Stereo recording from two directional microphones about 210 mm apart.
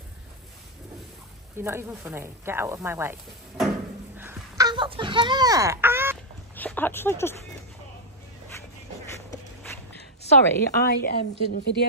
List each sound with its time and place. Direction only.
1.6 s speech: 10° right (ahead or behind)
4.2 s a sound: 15° right (ahead or behind)
6.5 s speech: 10° left (ahead or behind)
10.8 s a woman's voice: 50° left (ahead or behind)